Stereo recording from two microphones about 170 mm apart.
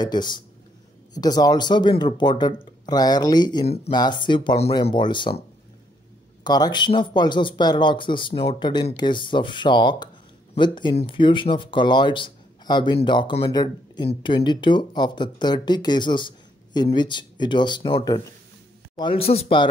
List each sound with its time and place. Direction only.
0.0 s speech: 25° left (ahead or behind)
3.6 s speech: 35° left (ahead or behind)
3.9 s speech: 25° left (ahead or behind)
6.4 s speech: 25° left (ahead or behind)